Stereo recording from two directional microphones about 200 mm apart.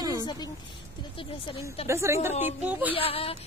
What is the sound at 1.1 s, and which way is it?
Speech, 25° left (ahead or behind).